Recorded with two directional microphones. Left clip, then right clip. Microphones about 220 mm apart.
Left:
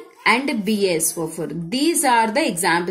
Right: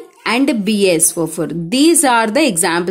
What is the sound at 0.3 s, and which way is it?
A woman's voice, 50° right (ahead or behind).